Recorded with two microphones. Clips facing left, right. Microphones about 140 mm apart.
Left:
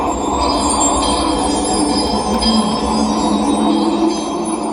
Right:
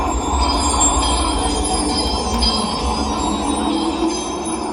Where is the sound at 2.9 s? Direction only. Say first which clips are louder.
Left 5 dB; 35° left (ahead or behind).